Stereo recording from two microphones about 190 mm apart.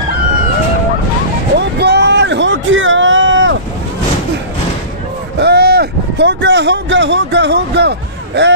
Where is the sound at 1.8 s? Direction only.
60° right (ahead or behind); by 3.5 s 85° right.